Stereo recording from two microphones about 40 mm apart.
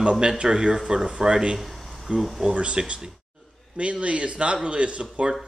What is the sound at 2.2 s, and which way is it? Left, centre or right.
Speech, centre.